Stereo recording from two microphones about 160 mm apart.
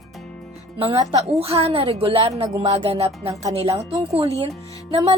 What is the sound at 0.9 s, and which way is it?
Speech, 20° right (ahead or behind).